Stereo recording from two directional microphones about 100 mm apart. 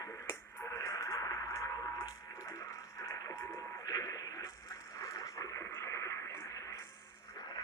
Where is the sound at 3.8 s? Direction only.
35° left (ahead or behind).